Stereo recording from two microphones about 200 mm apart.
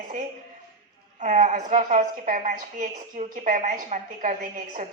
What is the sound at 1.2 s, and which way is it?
A woman's voice, 35° right (ahead or behind).